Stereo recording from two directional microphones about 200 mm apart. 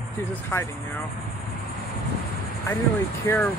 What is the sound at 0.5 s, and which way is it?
Speech, 10° left (ahead or behind).